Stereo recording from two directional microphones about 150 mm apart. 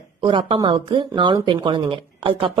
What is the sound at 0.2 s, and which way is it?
Speech, 30° right (ahead or behind).